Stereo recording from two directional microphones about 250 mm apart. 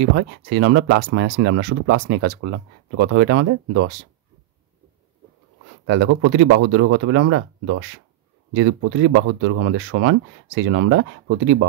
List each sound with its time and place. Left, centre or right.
0.1 s speech: right
5.9 s speech: right